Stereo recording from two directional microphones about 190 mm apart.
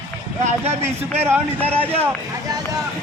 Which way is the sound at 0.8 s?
10° right (ahead or behind).